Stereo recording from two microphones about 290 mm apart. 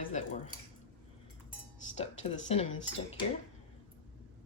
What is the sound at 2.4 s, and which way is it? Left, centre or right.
Cutlery, left.